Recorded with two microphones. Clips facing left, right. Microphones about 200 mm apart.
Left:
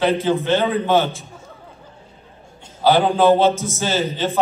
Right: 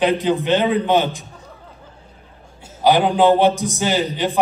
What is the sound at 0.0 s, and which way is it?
A man's voice, 15° right (ahead or behind).